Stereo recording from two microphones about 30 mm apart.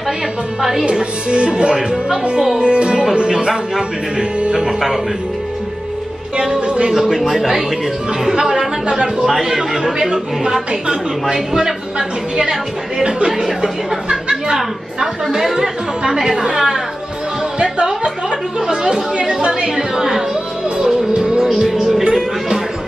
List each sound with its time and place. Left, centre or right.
0.6 s speech: centre
0.8 s music: right
4.5 s speech: right
4.7 s speech: centre
6.6 s speech: right
7.1 s speech: centre
8.8 s a woman's voice: right
9.2 s a woman's voice: centre
13.6 s speech: right
15.3 s speech: centre
19.1 s music: right
19.7 s a woman's voice: centre
21.5 s speech: centre